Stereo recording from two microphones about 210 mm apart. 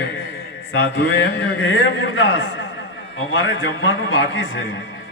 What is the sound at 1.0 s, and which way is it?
A man's voice, 60° left (ahead or behind).